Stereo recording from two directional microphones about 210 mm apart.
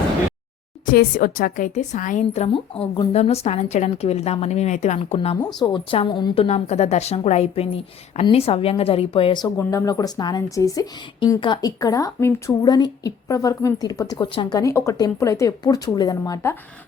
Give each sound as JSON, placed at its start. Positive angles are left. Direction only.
{"t": 0.9, "sound": "a woman's voice", "side_deg": 40}